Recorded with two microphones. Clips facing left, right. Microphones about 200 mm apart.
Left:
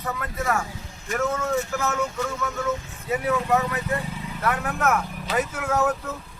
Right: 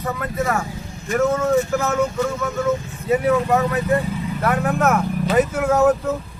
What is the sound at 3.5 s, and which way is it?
A man's voice, 45° right (ahead or behind).